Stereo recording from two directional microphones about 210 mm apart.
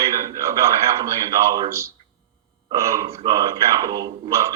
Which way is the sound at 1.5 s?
15° right (ahead or behind).